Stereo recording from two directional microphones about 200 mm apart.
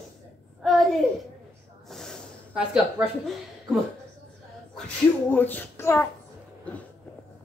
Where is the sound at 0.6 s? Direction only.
Centre (ahead or behind).